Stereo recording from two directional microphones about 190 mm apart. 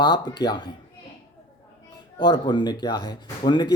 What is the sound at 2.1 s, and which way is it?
Speech, 20° left (ahead or behind).